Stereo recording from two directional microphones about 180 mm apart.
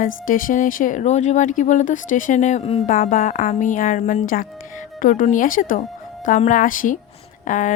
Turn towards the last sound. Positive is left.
turn(degrees=45)  # may be behind; listen again after turning